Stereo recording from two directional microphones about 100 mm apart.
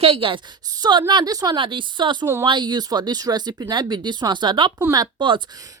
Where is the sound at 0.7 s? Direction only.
45° right (ahead or behind).